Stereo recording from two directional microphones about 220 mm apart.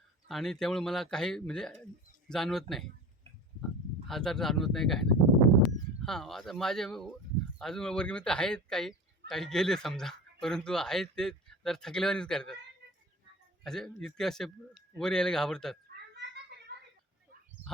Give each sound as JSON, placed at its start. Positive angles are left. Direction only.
{"t": 0.3, "sound": "speech", "side_deg": 0}
{"t": 4.0, "sound": "speech", "side_deg": 0}
{"t": 13.7, "sound": "speech", "side_deg": 0}
{"t": 16.1, "sound": "a sound", "side_deg": -50}